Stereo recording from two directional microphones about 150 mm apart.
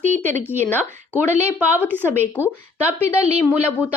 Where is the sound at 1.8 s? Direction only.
15° left (ahead or behind).